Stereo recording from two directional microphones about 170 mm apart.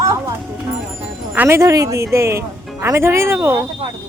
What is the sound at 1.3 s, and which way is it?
Speech, 15° right (ahead or behind).